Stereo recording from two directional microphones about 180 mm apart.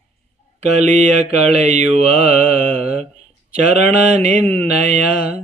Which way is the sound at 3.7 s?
40° right (ahead or behind).